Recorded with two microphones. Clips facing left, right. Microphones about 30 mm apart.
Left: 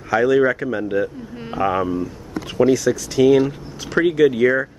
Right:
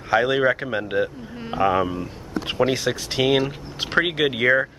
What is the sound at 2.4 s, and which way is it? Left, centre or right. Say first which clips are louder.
Speech: left 5 dB; right.